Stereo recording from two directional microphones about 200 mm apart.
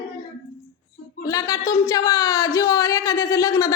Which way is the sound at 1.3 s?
20° left (ahead or behind).